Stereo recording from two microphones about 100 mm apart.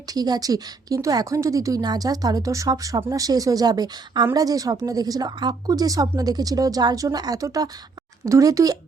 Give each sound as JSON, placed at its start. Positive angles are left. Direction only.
{"t": 0.1, "sound": "a woman's voice", "side_deg": -40}